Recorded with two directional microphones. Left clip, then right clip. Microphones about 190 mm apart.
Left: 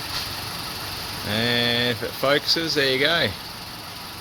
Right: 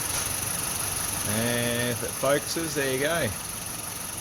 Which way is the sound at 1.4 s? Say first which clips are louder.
Left 7 dB; 25° left (ahead or behind).